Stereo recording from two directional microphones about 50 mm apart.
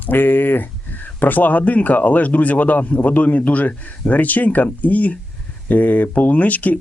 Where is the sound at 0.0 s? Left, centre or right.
Left.